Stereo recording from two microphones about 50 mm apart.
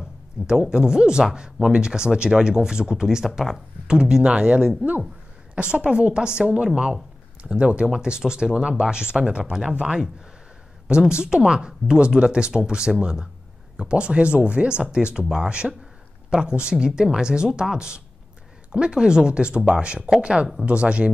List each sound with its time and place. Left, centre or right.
0.5 s speech: centre